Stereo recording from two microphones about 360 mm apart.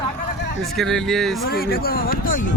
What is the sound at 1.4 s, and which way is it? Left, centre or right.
Speech, left.